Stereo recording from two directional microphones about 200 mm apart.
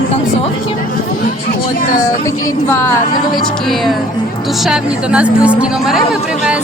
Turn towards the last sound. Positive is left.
turn(degrees=-5)  # may be behind; listen again after turning